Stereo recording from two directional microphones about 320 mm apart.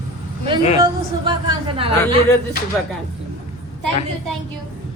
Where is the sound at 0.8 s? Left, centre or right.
Centre.